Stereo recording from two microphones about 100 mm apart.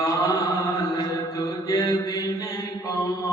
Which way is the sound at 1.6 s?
40° left (ahead or behind).